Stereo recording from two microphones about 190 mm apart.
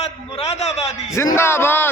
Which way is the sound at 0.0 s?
35° left (ahead or behind).